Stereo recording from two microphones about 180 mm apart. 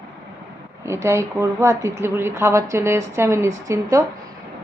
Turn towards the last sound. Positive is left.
turn(degrees=-15)  # may be behind; listen again after turning